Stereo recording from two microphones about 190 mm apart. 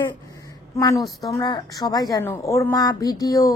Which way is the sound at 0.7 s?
20° left (ahead or behind).